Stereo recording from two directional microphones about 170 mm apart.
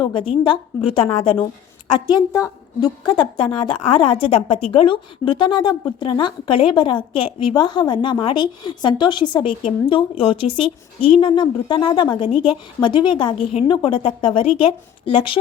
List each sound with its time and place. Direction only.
0.0 s a woman's voice: 30° left (ahead or behind)